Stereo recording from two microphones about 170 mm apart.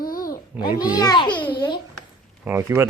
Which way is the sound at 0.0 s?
55° left (ahead or behind).